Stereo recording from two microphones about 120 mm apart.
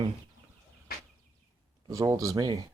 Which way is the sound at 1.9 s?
25° right (ahead or behind).